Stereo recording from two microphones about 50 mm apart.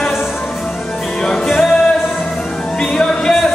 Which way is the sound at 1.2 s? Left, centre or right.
Centre.